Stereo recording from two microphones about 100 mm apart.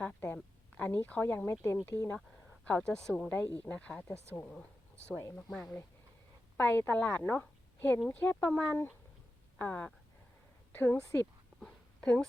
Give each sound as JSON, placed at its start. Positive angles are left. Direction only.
{"t": 0.8, "sound": "speech", "side_deg": 15}
{"t": 3.3, "sound": "speech", "side_deg": 20}
{"t": 6.6, "sound": "a woman's voice", "side_deg": 20}
{"t": 11.6, "sound": "a sound", "side_deg": 10}